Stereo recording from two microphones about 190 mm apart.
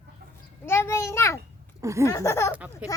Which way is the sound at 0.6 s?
15° left (ahead or behind).